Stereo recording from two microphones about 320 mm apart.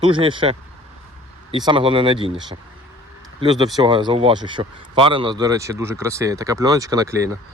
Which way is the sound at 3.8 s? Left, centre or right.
Centre.